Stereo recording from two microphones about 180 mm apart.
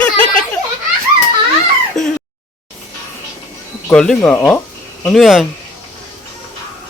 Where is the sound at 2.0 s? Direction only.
40° left (ahead or behind).